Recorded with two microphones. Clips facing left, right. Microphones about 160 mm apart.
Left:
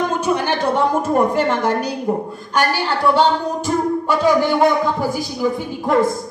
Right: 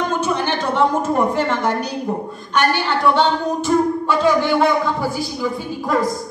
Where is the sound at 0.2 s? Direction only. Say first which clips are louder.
Left 2 dB; 10° left (ahead or behind).